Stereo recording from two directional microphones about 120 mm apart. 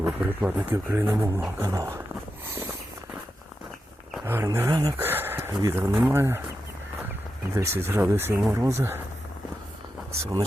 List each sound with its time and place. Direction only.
0.0 s speech: 15° right (ahead or behind)
1.7 s speech: 30° right (ahead or behind)
4.3 s speech: 20° right (ahead or behind)
5.0 s a sound: 15° right (ahead or behind)
5.6 s speech: 25° right (ahead or behind)
5.9 s speech: 10° right (ahead or behind)
6.1 s speech: 20° right (ahead or behind)
7.5 s speech: 25° right (ahead or behind)